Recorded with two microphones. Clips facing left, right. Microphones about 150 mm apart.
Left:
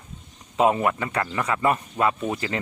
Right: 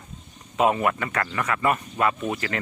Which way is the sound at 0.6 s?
25° left (ahead or behind).